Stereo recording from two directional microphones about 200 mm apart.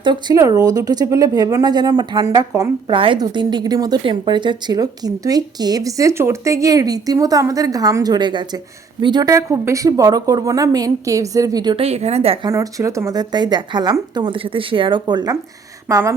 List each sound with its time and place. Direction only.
0.0 s a woman's voice: 20° right (ahead or behind)
12.5 s a woman's voice: 15° right (ahead or behind)